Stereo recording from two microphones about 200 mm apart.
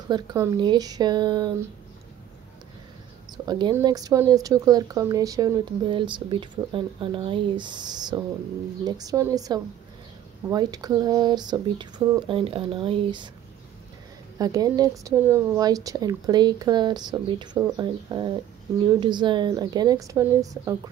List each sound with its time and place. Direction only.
0.1 s speech: 20° right (ahead or behind)
3.4 s speech: 20° right (ahead or behind)
14.4 s speech: 20° right (ahead or behind)